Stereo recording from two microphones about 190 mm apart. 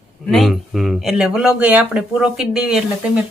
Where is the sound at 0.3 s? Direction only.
Centre (ahead or behind).